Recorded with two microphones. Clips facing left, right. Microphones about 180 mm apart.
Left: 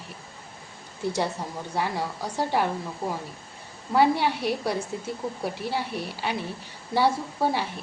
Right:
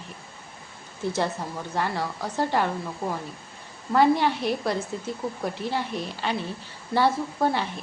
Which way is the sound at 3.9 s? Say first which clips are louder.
Right 1 dB; 10° left (ahead or behind).